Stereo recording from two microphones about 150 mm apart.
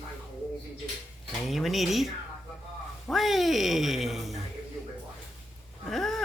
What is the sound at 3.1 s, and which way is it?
Speech, centre (ahead or behind).